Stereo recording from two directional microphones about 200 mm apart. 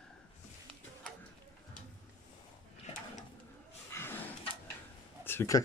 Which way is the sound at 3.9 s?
10° left (ahead or behind).